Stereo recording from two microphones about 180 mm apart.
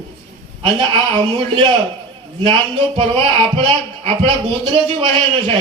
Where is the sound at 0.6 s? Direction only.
25° right (ahead or behind).